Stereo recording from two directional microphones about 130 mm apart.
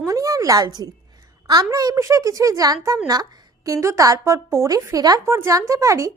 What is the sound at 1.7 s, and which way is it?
A woman's voice, 25° right (ahead or behind).